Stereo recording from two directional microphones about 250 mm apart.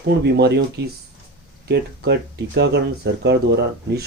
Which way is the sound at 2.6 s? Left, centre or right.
Right.